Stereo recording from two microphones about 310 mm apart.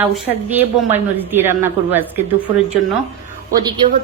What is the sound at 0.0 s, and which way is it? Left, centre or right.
A woman's voice, centre.